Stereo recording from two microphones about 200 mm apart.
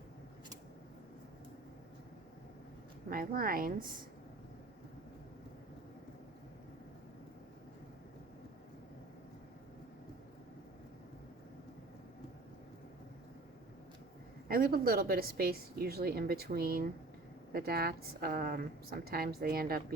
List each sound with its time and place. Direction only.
3.1 s a woman's voice: 45° right (ahead or behind)
14.4 s a woman's voice: 50° right (ahead or behind)